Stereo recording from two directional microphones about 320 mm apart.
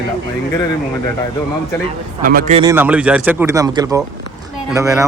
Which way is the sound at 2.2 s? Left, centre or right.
Right.